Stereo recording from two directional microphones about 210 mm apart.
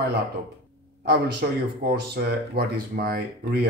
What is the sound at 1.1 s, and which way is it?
Speech, 50° right (ahead or behind).